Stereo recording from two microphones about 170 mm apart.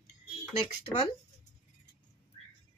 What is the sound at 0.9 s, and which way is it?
Speech, 35° left (ahead or behind).